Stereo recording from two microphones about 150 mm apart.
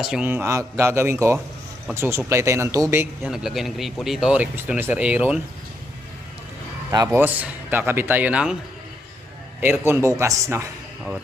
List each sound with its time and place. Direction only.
0.0 s speech: 5° right (ahead or behind)
3.2 s speech: centre (ahead or behind)
6.9 s speech: 20° right (ahead or behind)
9.8 s speech: 20° right (ahead or behind)